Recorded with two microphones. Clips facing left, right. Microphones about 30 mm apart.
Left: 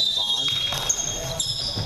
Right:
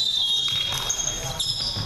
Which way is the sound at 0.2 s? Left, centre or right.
Centre.